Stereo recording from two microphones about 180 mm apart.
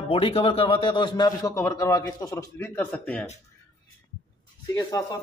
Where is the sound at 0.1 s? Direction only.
35° left (ahead or behind); by 3.3 s 10° left (ahead or behind).